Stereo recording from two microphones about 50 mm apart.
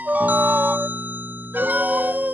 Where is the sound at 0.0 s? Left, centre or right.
Right.